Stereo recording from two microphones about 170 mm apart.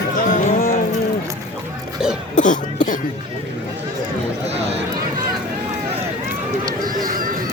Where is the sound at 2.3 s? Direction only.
50° left (ahead or behind).